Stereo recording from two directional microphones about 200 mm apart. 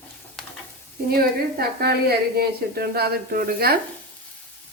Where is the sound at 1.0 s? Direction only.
50° right (ahead or behind).